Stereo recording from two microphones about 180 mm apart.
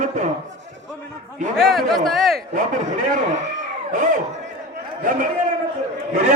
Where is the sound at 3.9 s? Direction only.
45° right (ahead or behind).